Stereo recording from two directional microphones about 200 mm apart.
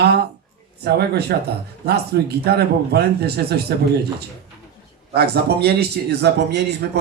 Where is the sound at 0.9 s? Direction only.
55° right (ahead or behind).